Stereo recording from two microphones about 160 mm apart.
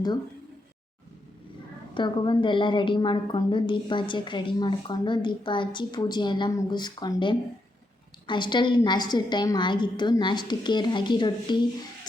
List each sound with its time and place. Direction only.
1.9 s a woman's voice: 30° left (ahead or behind)